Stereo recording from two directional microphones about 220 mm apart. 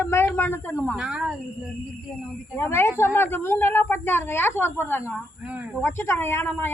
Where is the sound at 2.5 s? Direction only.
10° left (ahead or behind).